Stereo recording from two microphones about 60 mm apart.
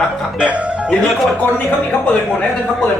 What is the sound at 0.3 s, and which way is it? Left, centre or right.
Speech, centre.